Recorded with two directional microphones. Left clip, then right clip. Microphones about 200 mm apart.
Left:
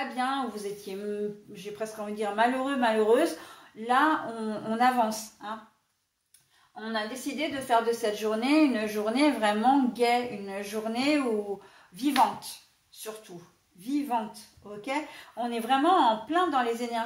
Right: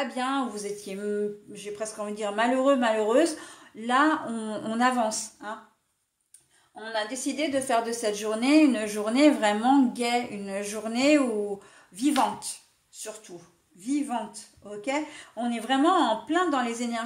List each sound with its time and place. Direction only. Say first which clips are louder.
0.1 s a woman's voice: right 1 dB; 50° right (ahead or behind)
6.8 s a woman's voice: right 2 dB; 50° right (ahead or behind)
13.7 s a woman's voice: even; 45° right (ahead or behind)